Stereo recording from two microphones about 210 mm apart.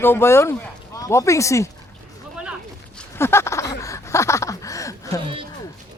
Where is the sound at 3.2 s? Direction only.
10° left (ahead or behind).